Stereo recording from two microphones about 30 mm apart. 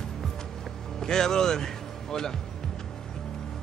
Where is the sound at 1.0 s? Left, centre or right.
Centre.